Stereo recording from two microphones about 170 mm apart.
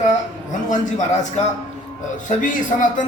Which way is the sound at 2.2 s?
50° left (ahead or behind).